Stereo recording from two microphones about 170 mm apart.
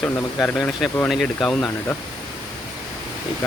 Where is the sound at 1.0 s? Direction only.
Centre (ahead or behind).